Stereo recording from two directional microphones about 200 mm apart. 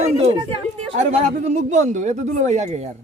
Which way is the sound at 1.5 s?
35° right (ahead or behind).